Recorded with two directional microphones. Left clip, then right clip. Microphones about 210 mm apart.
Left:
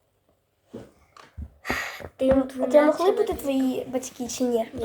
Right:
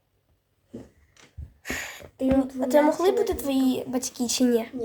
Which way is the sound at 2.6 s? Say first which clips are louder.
Left 1 dB; 60° right (ahead or behind).